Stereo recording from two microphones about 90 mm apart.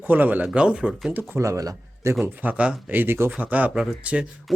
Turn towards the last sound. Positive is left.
turn(degrees=-10)  # may be behind; listen again after turning